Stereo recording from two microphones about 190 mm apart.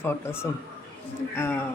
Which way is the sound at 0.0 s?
10° left (ahead or behind).